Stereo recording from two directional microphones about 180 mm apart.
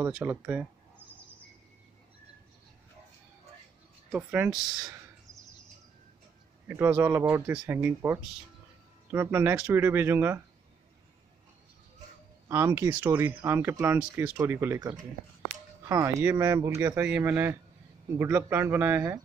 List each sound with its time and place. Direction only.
0.0 s speech: 10° right (ahead or behind)
4.1 s speech: 10° right (ahead or behind)
6.7 s speech: 10° right (ahead or behind)
12.4 s speech: 15° right (ahead or behind)